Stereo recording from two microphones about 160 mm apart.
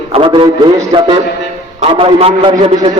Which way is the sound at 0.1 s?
35° right (ahead or behind).